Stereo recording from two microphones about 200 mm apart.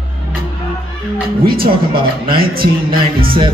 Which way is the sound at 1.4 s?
50° right (ahead or behind).